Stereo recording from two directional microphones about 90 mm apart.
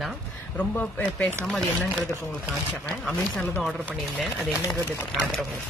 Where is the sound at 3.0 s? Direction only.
5° left (ahead or behind).